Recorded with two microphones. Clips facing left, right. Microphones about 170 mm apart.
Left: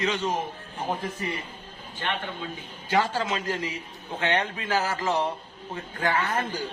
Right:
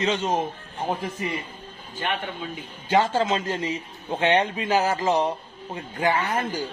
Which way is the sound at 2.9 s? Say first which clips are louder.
Right 4 dB; 25° right (ahead or behind).